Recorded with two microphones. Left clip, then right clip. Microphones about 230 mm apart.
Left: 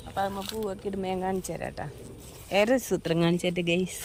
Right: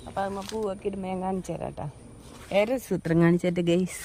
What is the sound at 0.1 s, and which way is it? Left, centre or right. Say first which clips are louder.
Speech: even; right.